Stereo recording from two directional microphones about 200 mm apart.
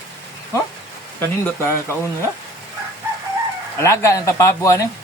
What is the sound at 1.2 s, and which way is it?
Speech, 10° left (ahead or behind).